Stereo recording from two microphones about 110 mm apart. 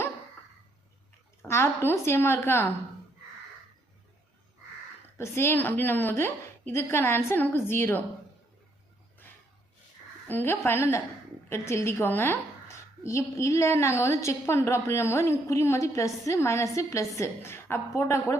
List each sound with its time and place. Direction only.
1.4 s a woman's voice: 25° left (ahead or behind)
5.1 s a woman's voice: 25° left (ahead or behind)
10.2 s a woman's voice: 20° left (ahead or behind)